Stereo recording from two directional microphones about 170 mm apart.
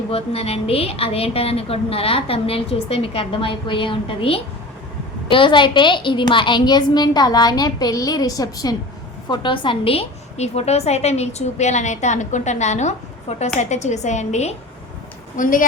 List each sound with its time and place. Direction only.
0.1 s a woman's voice: 35° left (ahead or behind); by 15.6 s 50° left (ahead or behind)